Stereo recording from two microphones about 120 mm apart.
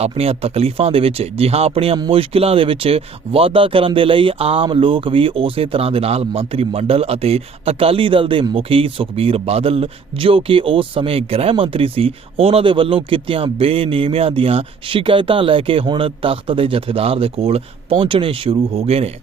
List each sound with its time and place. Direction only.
0.0 s speech: 55° right (ahead or behind)